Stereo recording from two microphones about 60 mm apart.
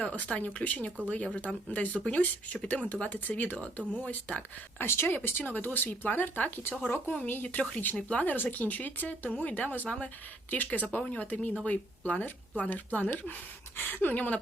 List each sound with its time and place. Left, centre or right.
0.0 s speech: left
7.4 s speech: left